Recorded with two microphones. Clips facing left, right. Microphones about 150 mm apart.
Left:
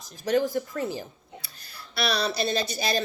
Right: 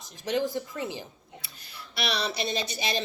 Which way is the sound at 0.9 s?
20° right (ahead or behind).